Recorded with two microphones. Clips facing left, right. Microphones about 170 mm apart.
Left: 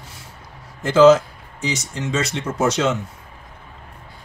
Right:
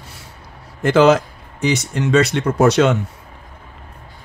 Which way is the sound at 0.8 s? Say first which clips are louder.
Left 1 dB; 65° right (ahead or behind).